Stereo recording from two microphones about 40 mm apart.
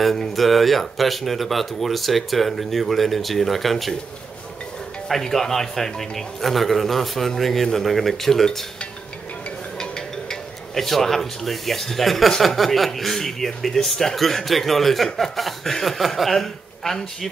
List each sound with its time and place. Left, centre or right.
0.0 s speech: centre
5.2 s speech: centre
9.8 s music: centre
10.7 s speech: centre